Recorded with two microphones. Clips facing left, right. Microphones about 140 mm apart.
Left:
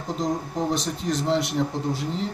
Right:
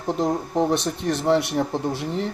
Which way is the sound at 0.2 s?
60° right (ahead or behind).